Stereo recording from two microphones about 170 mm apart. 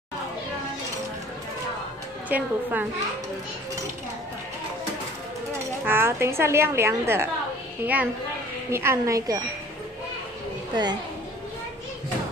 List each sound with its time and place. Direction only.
2.2 s a woman's voice: 10° right (ahead or behind)
5.9 s a woman's voice: 15° right (ahead or behind)
10.7 s a woman's voice: 25° right (ahead or behind)